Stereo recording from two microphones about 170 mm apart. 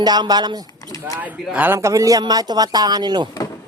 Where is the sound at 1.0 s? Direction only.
5° right (ahead or behind); by 3.3 s 25° right (ahead or behind).